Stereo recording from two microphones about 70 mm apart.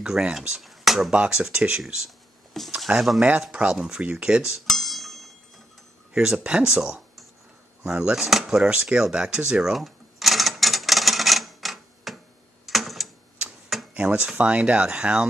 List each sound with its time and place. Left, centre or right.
0.0 s a sound: centre
1.1 s speech: centre
2.6 s speech: centre
4.6 s music: centre
6.1 s speech: centre
7.8 s a sound: centre
12.6 s typewriter: centre
13.4 s a sound: centre
13.9 s speech: centre